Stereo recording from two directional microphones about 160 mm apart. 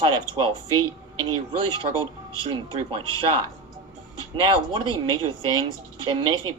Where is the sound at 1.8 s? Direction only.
35° right (ahead or behind).